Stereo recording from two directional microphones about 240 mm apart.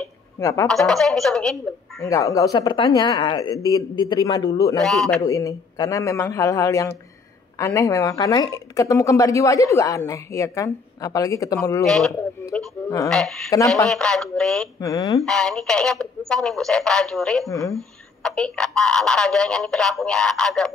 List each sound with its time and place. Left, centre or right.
0.4 s speech: centre
0.7 s speech: centre
2.0 s speech: centre
4.8 s speech: centre
5.2 s speech: centre
11.8 s speech: centre
12.4 s speech: centre
13.1 s speech: centre
14.8 s speech: centre
15.2 s speech: centre
17.5 s speech: centre